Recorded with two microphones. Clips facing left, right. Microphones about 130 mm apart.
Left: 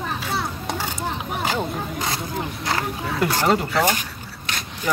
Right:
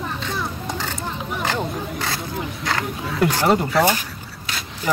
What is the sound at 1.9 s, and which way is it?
Speech, 20° left (ahead or behind).